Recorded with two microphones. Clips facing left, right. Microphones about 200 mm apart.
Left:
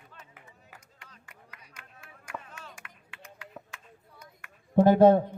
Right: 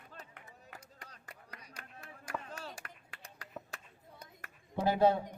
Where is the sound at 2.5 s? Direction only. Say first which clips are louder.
Right 3 dB; 35° right (ahead or behind).